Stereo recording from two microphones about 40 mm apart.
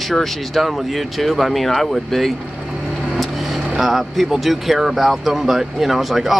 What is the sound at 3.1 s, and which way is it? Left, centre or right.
Vehicle, centre.